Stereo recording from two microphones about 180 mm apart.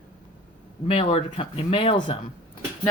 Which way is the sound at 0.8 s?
35° left (ahead or behind).